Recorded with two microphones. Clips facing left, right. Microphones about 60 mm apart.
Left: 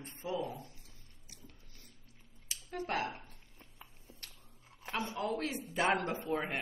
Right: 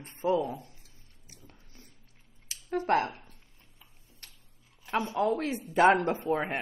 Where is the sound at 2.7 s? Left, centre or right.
Right.